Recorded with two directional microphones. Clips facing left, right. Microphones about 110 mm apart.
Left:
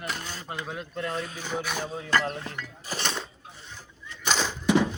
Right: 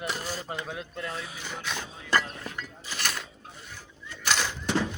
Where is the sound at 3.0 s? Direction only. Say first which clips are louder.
Left 2 dB; 25° left (ahead or behind).